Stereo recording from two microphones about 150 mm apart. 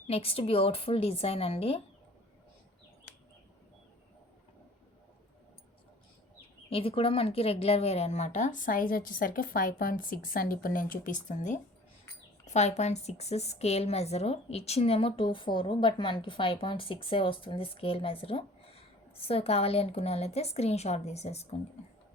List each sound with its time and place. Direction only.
0.1 s a woman's voice: 40° left (ahead or behind)
6.7 s a woman's voice: 40° left (ahead or behind)